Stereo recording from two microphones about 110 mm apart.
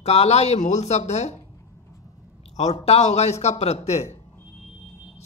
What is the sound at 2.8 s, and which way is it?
Speech, 75° left (ahead or behind).